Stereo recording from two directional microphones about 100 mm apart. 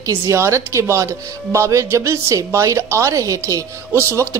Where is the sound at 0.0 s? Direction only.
30° right (ahead or behind).